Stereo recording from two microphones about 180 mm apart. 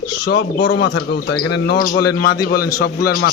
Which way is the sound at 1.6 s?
60° left (ahead or behind).